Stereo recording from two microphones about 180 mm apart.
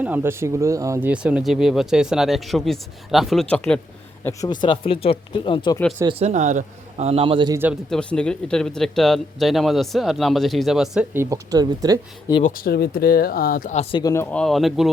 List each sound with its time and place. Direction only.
0.0 s speech: 10° right (ahead or behind); by 3.8 s 5° left (ahead or behind)
4.2 s speech: 15° left (ahead or behind)
4.6 s speech: 30° left (ahead or behind)
6.1 s a man's voice: 35° right (ahead or behind)
7.9 s speech: 5° left (ahead or behind)
11.2 s speech: 20° right (ahead or behind)
12.4 s speech: 50° left (ahead or behind)
14.0 s speech: 15° left (ahead or behind); by 14.9 s centre (ahead or behind)